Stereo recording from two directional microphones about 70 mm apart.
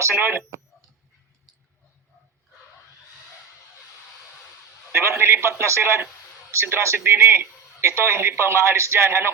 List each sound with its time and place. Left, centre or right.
0.0 s a man's voice: right
4.9 s a man's voice: right